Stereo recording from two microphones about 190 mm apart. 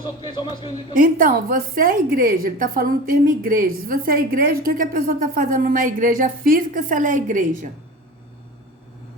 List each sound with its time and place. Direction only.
0.0 s a man's voice: 25° left (ahead or behind)
0.9 s a woman's voice: 45° right (ahead or behind)